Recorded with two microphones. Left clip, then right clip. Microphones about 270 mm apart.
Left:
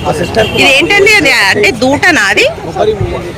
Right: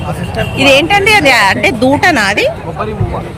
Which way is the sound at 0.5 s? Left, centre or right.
Centre.